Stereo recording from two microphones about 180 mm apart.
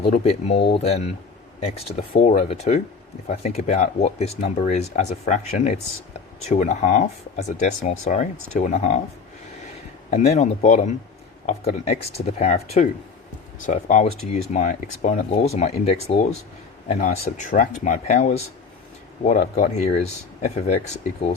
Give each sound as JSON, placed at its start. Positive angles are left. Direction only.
{"t": 0.3, "sound": "speech", "side_deg": 35}
{"t": 10.1, "sound": "speech", "side_deg": 45}